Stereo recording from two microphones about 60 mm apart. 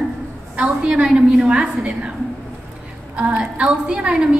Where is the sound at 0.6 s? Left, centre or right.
Centre.